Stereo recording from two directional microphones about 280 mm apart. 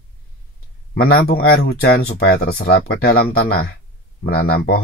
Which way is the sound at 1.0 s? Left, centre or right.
Left.